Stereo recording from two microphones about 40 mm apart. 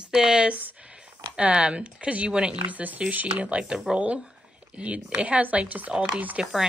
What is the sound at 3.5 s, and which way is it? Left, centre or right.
Speech, right.